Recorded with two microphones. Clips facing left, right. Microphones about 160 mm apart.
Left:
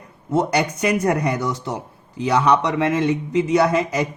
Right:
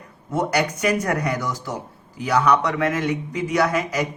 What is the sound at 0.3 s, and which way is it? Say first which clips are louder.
Speech: left 2 dB; 20° left (ahead or behind).